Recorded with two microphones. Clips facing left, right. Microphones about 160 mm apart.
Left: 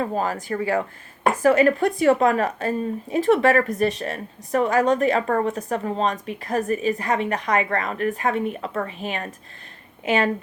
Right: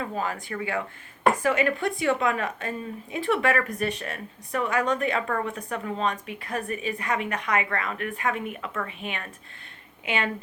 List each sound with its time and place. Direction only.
0.0 s speech: 40° left (ahead or behind)